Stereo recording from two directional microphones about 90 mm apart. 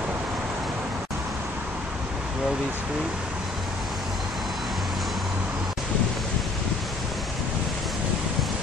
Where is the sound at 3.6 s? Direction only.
Centre (ahead or behind).